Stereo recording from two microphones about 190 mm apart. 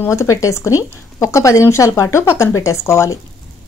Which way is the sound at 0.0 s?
15° left (ahead or behind).